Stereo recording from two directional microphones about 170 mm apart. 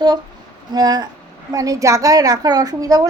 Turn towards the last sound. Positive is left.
turn(degrees=-20)  # may be behind; listen again after turning